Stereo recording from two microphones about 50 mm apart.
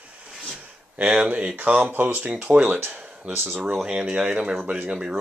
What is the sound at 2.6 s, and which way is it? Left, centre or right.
Speech, right.